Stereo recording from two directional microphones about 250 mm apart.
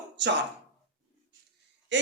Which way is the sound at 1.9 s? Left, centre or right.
Right.